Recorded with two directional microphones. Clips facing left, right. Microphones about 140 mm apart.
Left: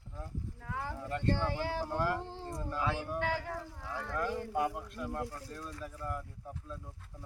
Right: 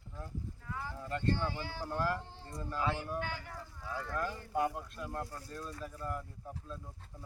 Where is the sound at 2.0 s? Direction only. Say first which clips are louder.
Even; 15° left (ahead or behind).